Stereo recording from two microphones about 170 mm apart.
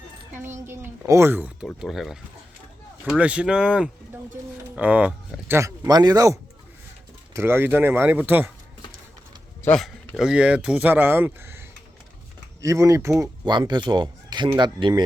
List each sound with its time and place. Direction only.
0.4 s speech: 15° right (ahead or behind)
1.6 s speech: centre (ahead or behind)
9.6 s speech: 5° left (ahead or behind); by 11.6 s 15° right (ahead or behind)
12.6 s speech: 20° right (ahead or behind)